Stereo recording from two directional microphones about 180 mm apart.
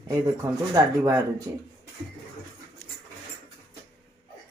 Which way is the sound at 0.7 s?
15° right (ahead or behind).